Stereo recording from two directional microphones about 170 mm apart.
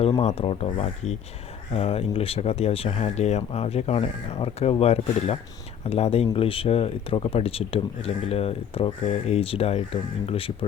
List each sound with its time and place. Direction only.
0.0 s speech: 35° left (ahead or behind)